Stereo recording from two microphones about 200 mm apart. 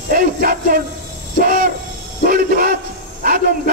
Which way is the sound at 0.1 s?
45° right (ahead or behind).